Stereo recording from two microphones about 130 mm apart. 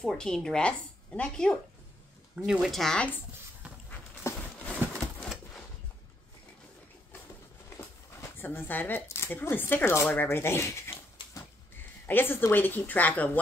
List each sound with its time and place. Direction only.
0.0 s a woman's voice: 5° left (ahead or behind)
2.3 s a woman's voice: 5° right (ahead or behind); by 3.3 s 10° left (ahead or behind)
3.9 s a sound: 10° left (ahead or behind)
4.9 s pigeon: 5° left (ahead or behind)
8.2 s speech: 15° left (ahead or behind)
10.0 s a sound: 15° left (ahead or behind)
12.1 s a woman's voice: 15° left (ahead or behind)